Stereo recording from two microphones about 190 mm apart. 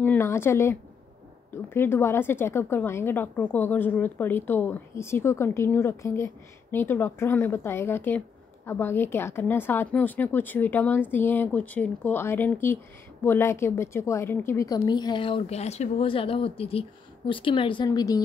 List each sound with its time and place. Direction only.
0.0 s a woman's voice: 10° left (ahead or behind)